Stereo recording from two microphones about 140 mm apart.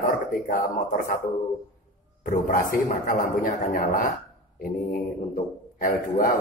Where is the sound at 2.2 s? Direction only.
75° left (ahead or behind).